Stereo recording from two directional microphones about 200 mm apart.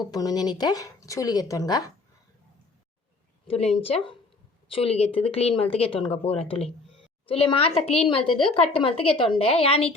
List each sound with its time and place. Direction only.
0.0 s a woman's voice: 20° left (ahead or behind)
3.4 s a woman's voice: 30° left (ahead or behind)